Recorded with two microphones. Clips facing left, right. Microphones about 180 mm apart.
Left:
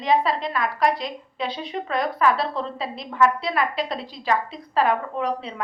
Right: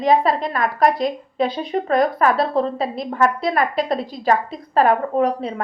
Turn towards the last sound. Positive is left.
turn(degrees=-45)  # may be behind; listen again after turning